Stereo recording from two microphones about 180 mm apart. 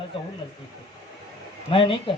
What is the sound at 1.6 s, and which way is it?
Speech, 30° left (ahead or behind).